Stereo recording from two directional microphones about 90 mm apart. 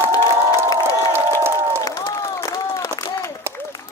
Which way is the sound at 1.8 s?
40° left (ahead or behind).